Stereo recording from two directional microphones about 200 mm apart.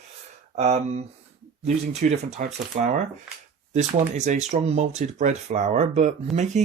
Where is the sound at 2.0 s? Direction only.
40° right (ahead or behind).